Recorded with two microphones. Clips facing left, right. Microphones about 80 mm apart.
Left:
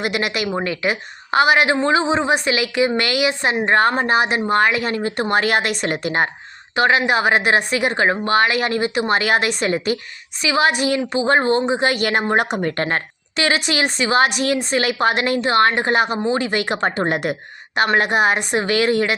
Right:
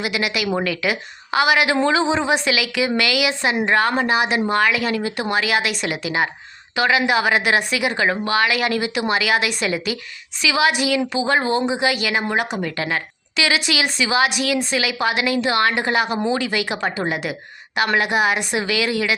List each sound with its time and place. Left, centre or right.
0.0 s speech: left
0.6 s a woman's voice: left